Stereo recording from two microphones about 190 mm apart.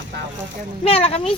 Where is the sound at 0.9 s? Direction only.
30° left (ahead or behind).